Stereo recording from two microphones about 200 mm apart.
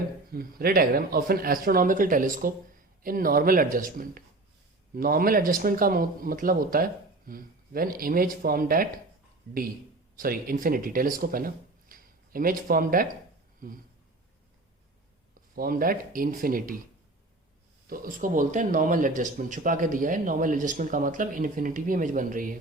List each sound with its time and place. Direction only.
0.3 s speech: 50° right (ahead or behind)
10.2 s speech: 45° right (ahead or behind)
15.4 s speech: 45° right (ahead or behind)
17.8 s speech: 45° right (ahead or behind)